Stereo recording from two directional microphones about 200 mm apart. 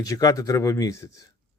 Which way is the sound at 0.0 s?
15° left (ahead or behind).